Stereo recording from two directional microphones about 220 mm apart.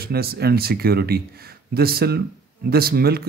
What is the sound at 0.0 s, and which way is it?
Speech, 45° right (ahead or behind).